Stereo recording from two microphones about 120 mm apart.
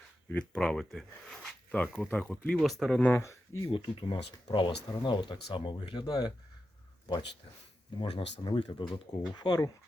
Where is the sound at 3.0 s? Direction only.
20° left (ahead or behind).